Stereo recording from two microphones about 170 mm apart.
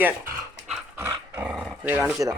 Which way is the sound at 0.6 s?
10° right (ahead or behind).